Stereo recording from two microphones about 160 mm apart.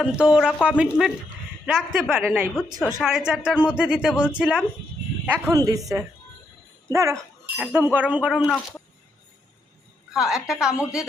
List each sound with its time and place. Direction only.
0.0 s speech: 5° right (ahead or behind)
5.2 s speech: 20° right (ahead or behind)
6.9 s speech: 20° right (ahead or behind)
10.1 s a woman's voice: 5° right (ahead or behind)